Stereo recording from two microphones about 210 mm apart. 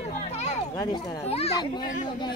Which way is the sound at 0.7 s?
20° left (ahead or behind).